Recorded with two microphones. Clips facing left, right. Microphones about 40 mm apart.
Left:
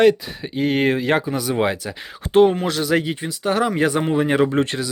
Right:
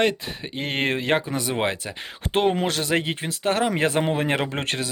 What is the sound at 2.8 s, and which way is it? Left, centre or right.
Speech, right.